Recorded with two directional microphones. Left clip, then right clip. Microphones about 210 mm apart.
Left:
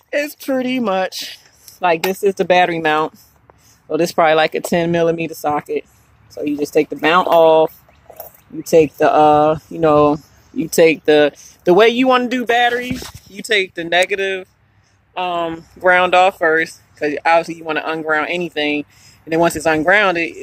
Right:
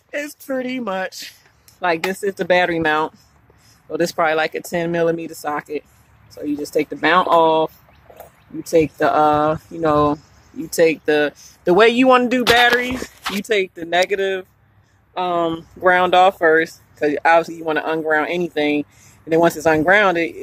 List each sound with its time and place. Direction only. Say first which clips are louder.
0.1 s speech: left 6 dB; 35° left (ahead or behind)
11.7 s speech: left 1 dB; 5° left (ahead or behind)
15.1 s speech: even; 15° right (ahead or behind)